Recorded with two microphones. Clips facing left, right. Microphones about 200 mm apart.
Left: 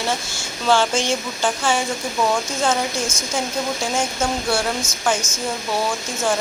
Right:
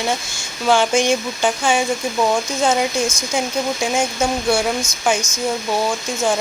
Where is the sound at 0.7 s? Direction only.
15° right (ahead or behind).